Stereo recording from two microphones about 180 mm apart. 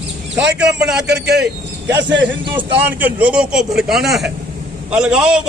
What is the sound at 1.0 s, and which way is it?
A man's voice, 70° right (ahead or behind).